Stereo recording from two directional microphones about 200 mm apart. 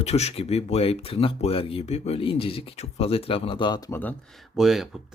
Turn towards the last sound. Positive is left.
turn(degrees=0)  # may be behind; listen again after turning